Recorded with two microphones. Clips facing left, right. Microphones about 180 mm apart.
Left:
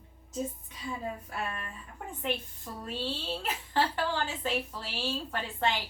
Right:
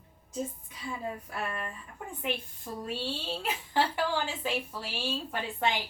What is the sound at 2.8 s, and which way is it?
A woman's voice, 10° right (ahead or behind).